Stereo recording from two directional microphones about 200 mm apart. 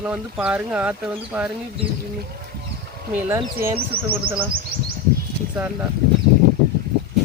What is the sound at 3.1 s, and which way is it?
Speech, 10° right (ahead or behind).